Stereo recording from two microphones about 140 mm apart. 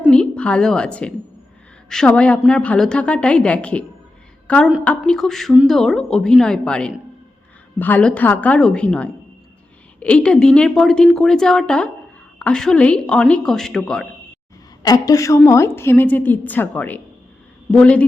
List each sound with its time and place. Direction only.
0.1 s a woman's voice: 5° left (ahead or behind)
14.8 s a woman's voice: 25° left (ahead or behind); by 18.0 s 10° left (ahead or behind)